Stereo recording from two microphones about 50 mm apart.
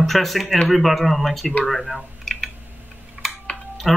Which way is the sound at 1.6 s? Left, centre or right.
Centre.